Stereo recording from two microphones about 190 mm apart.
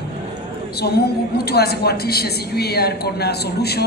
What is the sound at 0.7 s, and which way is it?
A woman's voice, 55° left (ahead or behind).